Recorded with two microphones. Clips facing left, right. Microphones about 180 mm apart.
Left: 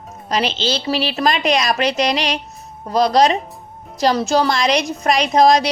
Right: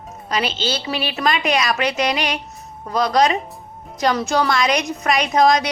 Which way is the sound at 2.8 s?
35° left (ahead or behind).